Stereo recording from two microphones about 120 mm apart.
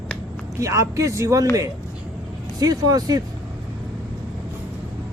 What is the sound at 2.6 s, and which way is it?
Speech, 30° right (ahead or behind).